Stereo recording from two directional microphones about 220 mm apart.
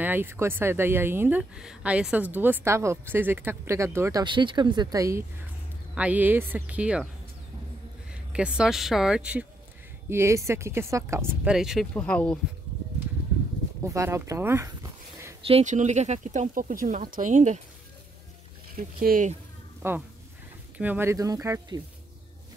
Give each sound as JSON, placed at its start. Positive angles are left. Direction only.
{"t": 0.0, "sound": "speech", "side_deg": -10}
{"t": 8.1, "sound": "speech", "side_deg": -5}
{"t": 13.8, "sound": "speech", "side_deg": -15}
{"t": 15.4, "sound": "speech", "side_deg": -30}
{"t": 18.8, "sound": "speech", "side_deg": -40}
{"t": 19.8, "sound": "speech", "side_deg": -10}